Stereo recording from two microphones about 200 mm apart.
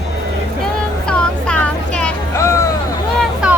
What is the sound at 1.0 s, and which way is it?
Vehicle, 5° left (ahead or behind).